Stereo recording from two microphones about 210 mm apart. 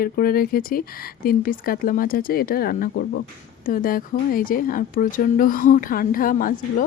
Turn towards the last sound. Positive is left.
turn(degrees=40)  # may be behind; listen again after turning